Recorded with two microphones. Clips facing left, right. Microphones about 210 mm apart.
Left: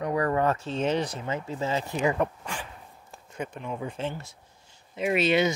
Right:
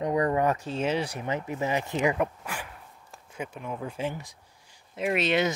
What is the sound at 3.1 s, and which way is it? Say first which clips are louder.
Speech: left 2 dB; 5° right (ahead or behind).